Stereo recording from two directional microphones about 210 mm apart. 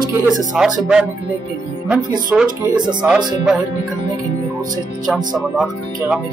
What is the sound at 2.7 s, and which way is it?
Speech, 20° right (ahead or behind).